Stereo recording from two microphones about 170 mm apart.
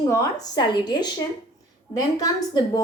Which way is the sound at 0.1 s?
20° left (ahead or behind).